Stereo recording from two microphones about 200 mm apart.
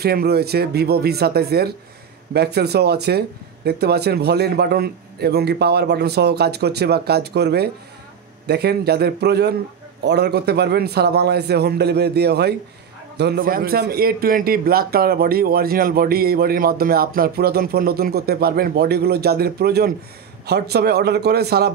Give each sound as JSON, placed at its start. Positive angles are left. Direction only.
{"t": 0.0, "sound": "a man's voice", "side_deg": -50}